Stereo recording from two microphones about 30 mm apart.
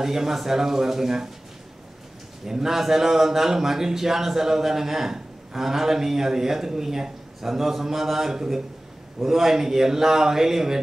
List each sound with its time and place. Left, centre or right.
0.0 s a man's voice: centre
2.4 s a man's voice: centre